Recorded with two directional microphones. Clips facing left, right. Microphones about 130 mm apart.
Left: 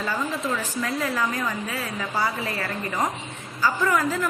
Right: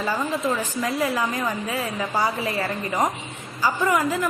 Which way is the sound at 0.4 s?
15° right (ahead or behind).